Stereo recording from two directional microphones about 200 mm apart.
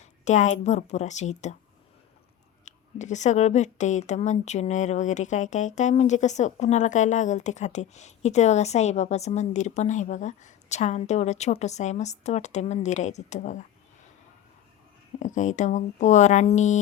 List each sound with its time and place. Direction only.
0.0 s speech: 35° left (ahead or behind)
2.6 s speech: 35° left (ahead or behind)
15.2 s speech: 35° left (ahead or behind)